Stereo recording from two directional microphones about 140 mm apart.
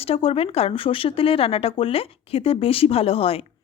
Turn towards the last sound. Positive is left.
turn(degrees=45)  # may be behind; listen again after turning